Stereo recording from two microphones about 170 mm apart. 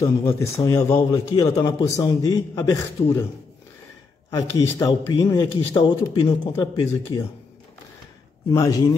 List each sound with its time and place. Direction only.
0.0 s a man's voice: 15° left (ahead or behind)
4.3 s a man's voice: 20° left (ahead or behind)
5.4 s speech: 30° left (ahead or behind)
8.5 s a man's voice: 20° left (ahead or behind)